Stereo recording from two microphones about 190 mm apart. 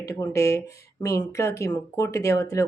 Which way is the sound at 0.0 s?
15° left (ahead or behind).